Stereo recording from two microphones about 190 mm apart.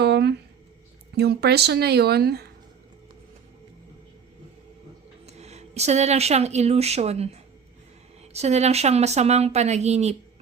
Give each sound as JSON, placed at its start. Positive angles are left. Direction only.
{"t": 0.0, "sound": "a sound", "side_deg": -60}
{"t": 1.1, "sound": "speech", "side_deg": -60}
{"t": 5.2, "sound": "speech", "side_deg": -35}